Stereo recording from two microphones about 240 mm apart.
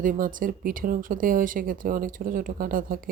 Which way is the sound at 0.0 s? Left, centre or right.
Right.